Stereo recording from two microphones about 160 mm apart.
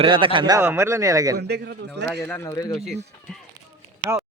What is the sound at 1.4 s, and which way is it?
Speech, 90° right.